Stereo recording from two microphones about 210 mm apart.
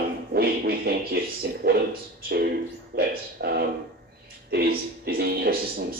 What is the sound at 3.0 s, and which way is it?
Speech, 50° right (ahead or behind).